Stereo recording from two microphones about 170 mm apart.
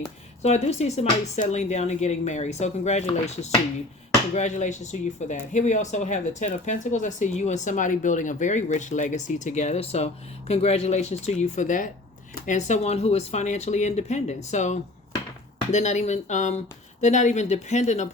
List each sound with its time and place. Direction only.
0.4 s speech: 40° left (ahead or behind)